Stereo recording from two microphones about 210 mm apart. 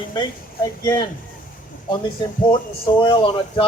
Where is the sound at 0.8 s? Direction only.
15° left (ahead or behind).